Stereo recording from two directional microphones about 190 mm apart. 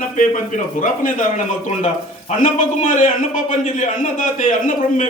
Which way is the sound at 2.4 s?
45° left (ahead or behind).